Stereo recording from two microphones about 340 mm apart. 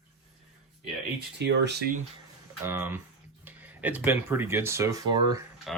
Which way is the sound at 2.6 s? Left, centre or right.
Centre.